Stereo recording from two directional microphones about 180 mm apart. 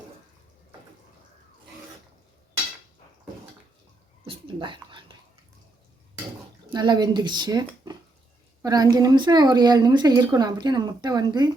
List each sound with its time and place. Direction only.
4.3 s whispering: 25° right (ahead or behind)
6.7 s a woman's voice: 25° right (ahead or behind)